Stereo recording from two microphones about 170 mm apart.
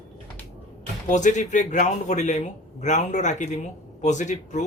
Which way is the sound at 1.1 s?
45° left (ahead or behind).